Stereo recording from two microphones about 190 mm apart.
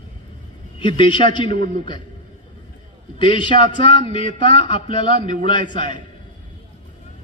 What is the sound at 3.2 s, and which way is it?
A man's voice, 25° left (ahead or behind).